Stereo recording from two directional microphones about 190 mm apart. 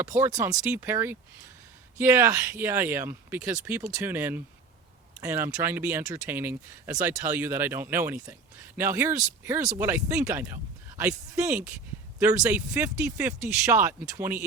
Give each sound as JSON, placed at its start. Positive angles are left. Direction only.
{"t": 0.2, "sound": "speech", "side_deg": -15}